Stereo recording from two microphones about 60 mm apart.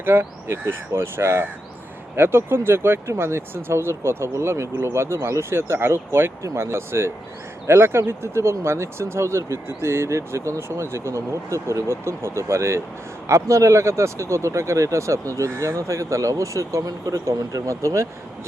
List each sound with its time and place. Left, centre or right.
0.0 s speech: right